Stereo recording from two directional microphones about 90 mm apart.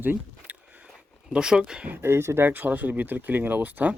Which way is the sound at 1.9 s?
30° right (ahead or behind).